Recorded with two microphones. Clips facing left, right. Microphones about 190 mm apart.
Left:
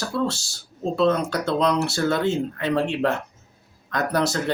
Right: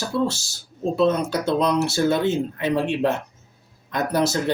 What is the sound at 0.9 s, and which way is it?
Mantra, 20° right (ahead or behind).